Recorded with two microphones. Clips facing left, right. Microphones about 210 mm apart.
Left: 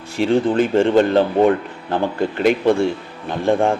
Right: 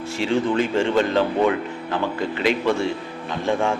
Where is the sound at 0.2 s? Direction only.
55° left (ahead or behind).